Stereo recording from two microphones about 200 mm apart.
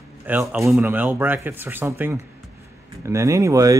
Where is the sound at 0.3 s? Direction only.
5° right (ahead or behind).